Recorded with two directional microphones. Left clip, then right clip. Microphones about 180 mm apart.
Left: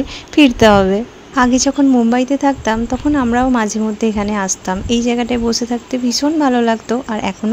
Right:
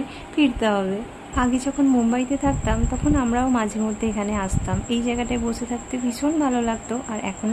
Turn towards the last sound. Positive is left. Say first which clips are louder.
# left 9 dB
turn(degrees=35)  # may be behind; listen again after turning